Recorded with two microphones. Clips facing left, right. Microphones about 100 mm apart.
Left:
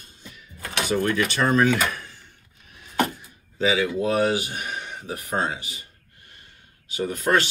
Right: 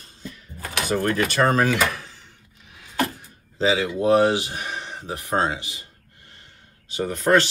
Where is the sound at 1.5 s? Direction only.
90° right.